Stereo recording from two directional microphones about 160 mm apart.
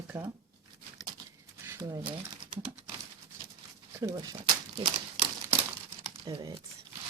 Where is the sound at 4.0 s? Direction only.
20° right (ahead or behind).